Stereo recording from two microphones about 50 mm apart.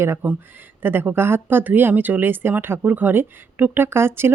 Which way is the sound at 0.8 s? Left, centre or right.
Right.